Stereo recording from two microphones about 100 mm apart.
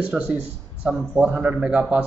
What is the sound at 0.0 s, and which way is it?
A man's voice, 10° right (ahead or behind).